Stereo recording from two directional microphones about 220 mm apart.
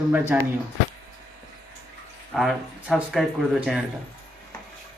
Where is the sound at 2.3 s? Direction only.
Centre (ahead or behind).